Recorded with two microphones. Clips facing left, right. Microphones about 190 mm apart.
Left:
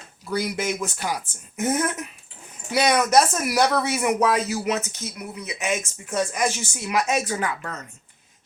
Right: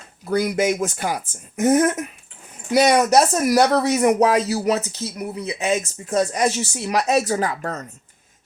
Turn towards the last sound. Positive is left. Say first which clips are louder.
# right 4 dB
turn(degrees=-40)  # may be behind; listen again after turning